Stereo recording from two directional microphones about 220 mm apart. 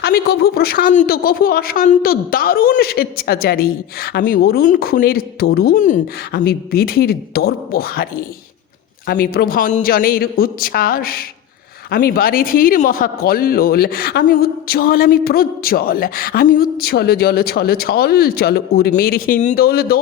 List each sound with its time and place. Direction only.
0.0 s a man's voice: 45° left (ahead or behind)